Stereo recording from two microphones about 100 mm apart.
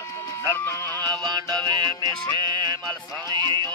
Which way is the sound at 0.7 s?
20° left (ahead or behind).